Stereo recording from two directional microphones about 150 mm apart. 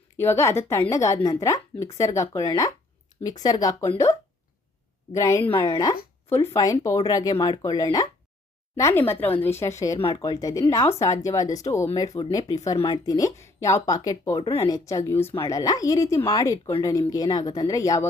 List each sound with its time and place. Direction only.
0.2 s a woman's voice: 15° left (ahead or behind)
5.5 s a woman's voice: 30° left (ahead or behind)
14.4 s speech: 40° left (ahead or behind)
14.7 s a woman's voice: 20° left (ahead or behind)